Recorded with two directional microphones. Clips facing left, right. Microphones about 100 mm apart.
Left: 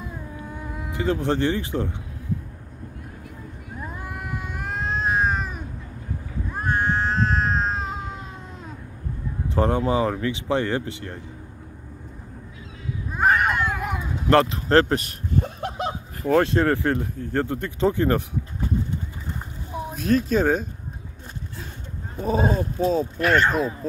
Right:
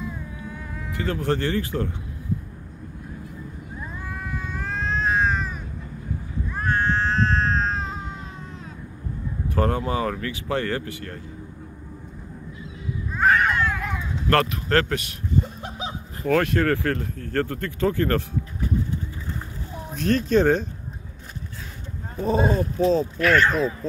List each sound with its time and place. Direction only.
0.7 s speech: 20° left (ahead or behind)
4.4 s cat: 10° left (ahead or behind)
9.6 s speech: 20° left (ahead or behind)
13.1 s cat: 15° left (ahead or behind)
14.5 s speech: 30° left (ahead or behind)
15.3 s a sound: 65° left (ahead or behind)
16.3 s speech: 20° left (ahead or behind)
19.9 s speech: 5° left (ahead or behind)
22.2 s speech: 5° left (ahead or behind)
23.1 s speech: 25° left (ahead or behind)